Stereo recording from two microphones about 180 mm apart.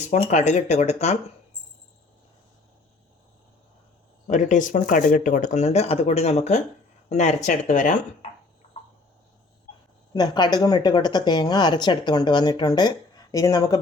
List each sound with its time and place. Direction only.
0.1 s speech: 40° left (ahead or behind)
4.3 s speech: 45° left (ahead or behind)
10.1 s speech: 25° left (ahead or behind)